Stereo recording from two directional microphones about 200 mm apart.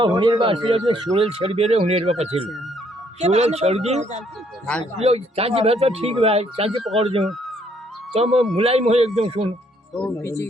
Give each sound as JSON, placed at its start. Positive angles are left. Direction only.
{"t": 0.0, "sound": "speech", "side_deg": -20}
{"t": 4.6, "sound": "speech", "side_deg": 5}
{"t": 4.9, "sound": "speech", "side_deg": -30}
{"t": 8.1, "sound": "speech", "side_deg": -30}
{"t": 9.9, "sound": "speech", "side_deg": 10}